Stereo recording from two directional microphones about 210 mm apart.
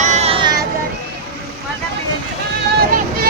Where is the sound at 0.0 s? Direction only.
30° right (ahead or behind).